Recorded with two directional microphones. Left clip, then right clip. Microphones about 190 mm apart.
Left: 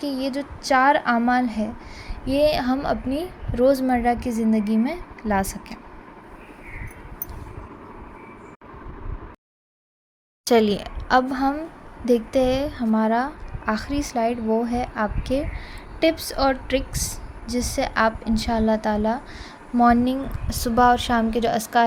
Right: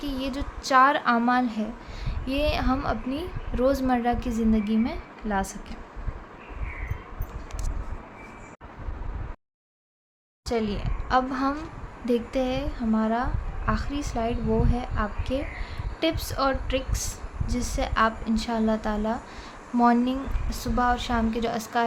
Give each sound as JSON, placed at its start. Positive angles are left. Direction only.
{"t": 0.0, "sound": "a woman's voice", "side_deg": 15}
{"t": 10.4, "sound": "a woman's voice", "side_deg": 45}
{"t": 11.3, "sound": "a woman's voice", "side_deg": 10}
{"t": 12.0, "sound": "a woman's voice", "side_deg": 25}